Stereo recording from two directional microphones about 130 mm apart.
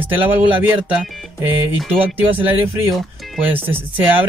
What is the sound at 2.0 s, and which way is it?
Speech, 15° right (ahead or behind).